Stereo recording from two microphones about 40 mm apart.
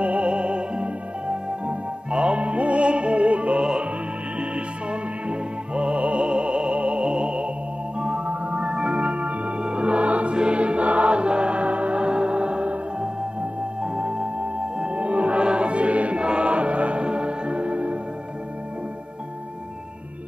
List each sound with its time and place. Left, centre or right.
0.0 s music: right
5.3 s music: right